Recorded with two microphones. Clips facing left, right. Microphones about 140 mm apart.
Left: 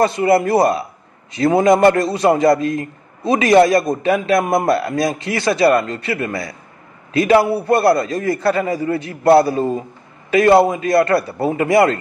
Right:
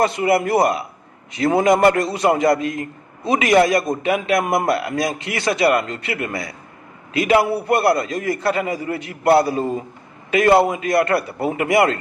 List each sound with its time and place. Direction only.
0.0 s a man's voice: 35° left (ahead or behind)